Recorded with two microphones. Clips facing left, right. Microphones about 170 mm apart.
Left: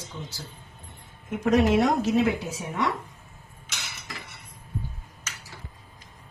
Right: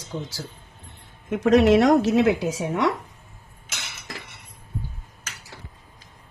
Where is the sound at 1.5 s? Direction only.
80° right.